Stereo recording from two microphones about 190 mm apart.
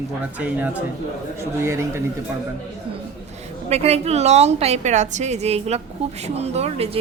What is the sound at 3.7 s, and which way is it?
A woman's voice, 35° right (ahead or behind).